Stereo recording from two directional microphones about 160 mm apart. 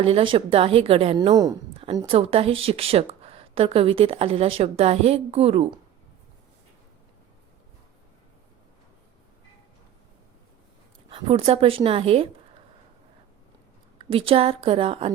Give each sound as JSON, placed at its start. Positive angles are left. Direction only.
{"t": 0.0, "sound": "speech", "side_deg": -35}
{"t": 11.1, "sound": "speech", "side_deg": -35}
{"t": 14.1, "sound": "speech", "side_deg": -35}